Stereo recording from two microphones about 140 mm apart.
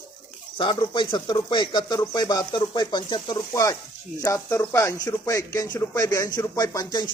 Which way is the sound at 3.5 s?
20° left (ahead or behind).